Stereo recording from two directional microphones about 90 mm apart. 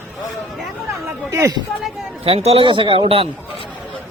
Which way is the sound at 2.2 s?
90° right.